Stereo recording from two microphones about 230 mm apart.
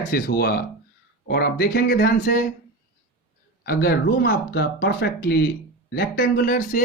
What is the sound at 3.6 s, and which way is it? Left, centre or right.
Speech, left.